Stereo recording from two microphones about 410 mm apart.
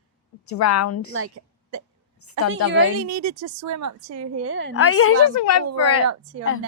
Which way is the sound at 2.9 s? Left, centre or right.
Right.